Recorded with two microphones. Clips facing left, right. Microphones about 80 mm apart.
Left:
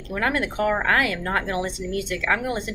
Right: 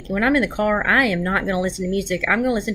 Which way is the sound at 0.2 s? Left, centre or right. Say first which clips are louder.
Right 4 dB; right.